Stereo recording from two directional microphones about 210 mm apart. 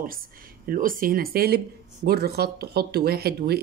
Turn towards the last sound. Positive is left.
turn(degrees=-50)  # may be behind; listen again after turning